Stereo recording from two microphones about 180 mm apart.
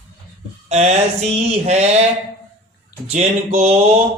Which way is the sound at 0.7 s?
35° right (ahead or behind).